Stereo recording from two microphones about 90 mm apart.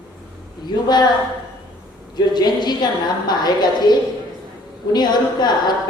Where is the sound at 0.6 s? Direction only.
50° left (ahead or behind).